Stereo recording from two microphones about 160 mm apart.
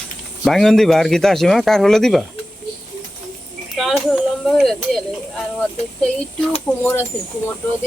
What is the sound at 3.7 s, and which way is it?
Speech, centre (ahead or behind).